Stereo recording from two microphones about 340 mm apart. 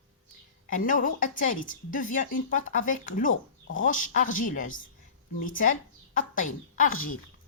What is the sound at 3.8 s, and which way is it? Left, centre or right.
A woman's voice, left.